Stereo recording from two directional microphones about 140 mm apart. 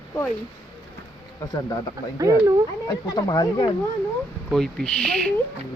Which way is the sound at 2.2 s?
20° right (ahead or behind).